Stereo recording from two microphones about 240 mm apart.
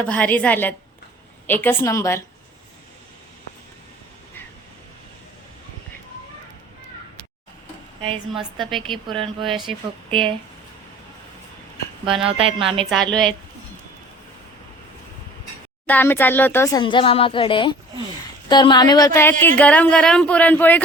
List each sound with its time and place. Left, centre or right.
0.0 s speech: centre
8.1 s a woman's voice: centre
9.6 s speech: right
12.2 s speech: right
12.9 s a woman's voice: centre
15.9 s speech: centre
16.8 s speech: left